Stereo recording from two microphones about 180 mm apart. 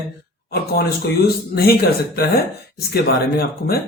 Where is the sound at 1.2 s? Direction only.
60° left (ahead or behind).